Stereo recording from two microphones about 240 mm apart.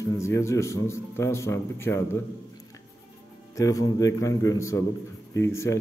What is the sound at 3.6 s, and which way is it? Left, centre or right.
A man's voice, centre.